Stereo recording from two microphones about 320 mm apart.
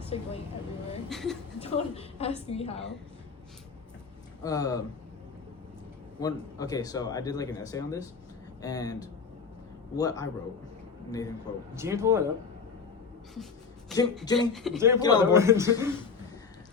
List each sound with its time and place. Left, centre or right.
0.1 s vehicle: centre
1.1 s speech: centre
1.5 s a woman's voice: centre
4.4 s speech: centre
6.1 s speech: centre
11.7 s a man's voice: centre
14.3 s speech: centre
14.5 s speech: centre
14.9 s speech: centre
15.2 s a man's voice: centre